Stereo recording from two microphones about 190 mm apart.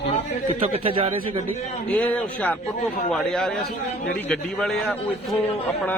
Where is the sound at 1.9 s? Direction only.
10° left (ahead or behind).